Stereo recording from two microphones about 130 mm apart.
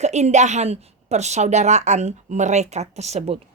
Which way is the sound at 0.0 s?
60° right (ahead or behind).